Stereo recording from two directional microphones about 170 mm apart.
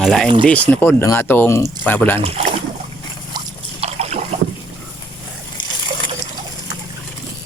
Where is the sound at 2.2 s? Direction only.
35° right (ahead or behind).